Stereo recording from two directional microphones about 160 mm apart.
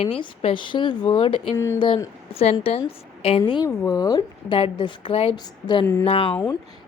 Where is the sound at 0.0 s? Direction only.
35° left (ahead or behind).